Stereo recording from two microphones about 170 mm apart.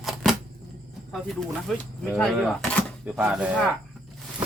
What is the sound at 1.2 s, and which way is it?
Speech, centre (ahead or behind).